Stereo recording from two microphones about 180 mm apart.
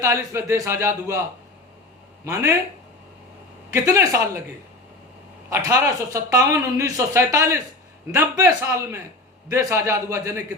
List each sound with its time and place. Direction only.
0.0 s speech: 15° right (ahead or behind)
2.2 s speech: 20° right (ahead or behind)
3.7 s speech: 20° right (ahead or behind)
5.5 s speech: 15° right (ahead or behind)